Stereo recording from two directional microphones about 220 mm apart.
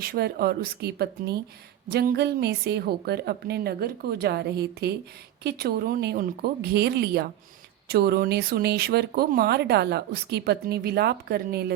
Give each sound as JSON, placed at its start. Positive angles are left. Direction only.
{"t": 0.0, "sound": "speech", "side_deg": -45}